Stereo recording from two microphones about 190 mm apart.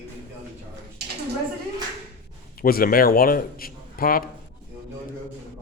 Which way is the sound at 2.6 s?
50° left (ahead or behind).